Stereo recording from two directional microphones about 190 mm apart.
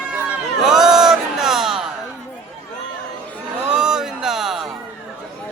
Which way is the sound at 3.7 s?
5° right (ahead or behind).